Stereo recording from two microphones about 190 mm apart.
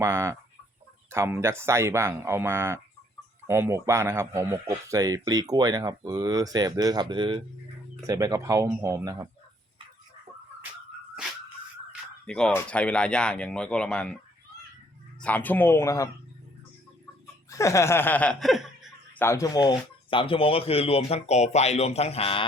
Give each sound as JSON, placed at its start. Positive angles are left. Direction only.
{"t": 0.0, "sound": "a man's voice", "side_deg": -15}
{"t": 12.2, "sound": "speech", "side_deg": 5}
{"t": 15.2, "sound": "speech", "side_deg": 10}
{"t": 17.5, "sound": "speech", "side_deg": 15}
{"t": 19.2, "sound": "speech", "side_deg": 15}